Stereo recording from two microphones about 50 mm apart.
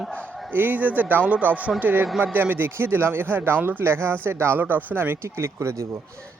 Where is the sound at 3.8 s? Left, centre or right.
Right.